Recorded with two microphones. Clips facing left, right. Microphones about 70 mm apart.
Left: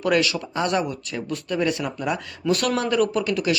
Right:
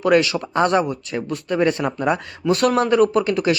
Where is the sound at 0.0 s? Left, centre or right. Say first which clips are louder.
Right 5 dB; right.